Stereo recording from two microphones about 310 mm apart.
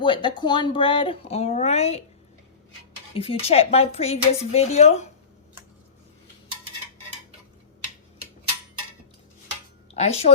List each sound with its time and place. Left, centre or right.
0.0 s speech: centre
3.2 s speech: centre
9.9 s speech: left